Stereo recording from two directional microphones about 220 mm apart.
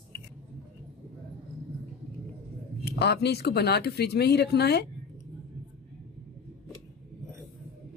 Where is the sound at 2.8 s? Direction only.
50° left (ahead or behind).